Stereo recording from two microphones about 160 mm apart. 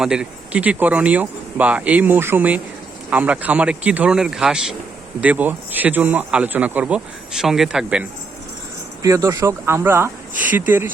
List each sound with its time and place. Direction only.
0.0 s speech: 5° right (ahead or behind)
9.0 s speech: 20° right (ahead or behind)